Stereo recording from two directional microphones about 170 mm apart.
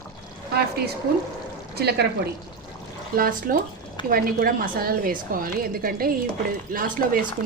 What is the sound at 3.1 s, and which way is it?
A woman's voice, 60° right (ahead or behind).